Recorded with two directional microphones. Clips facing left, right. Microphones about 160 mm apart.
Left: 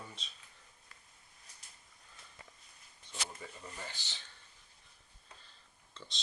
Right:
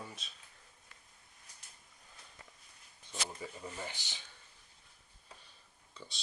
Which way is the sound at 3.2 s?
15° right (ahead or behind).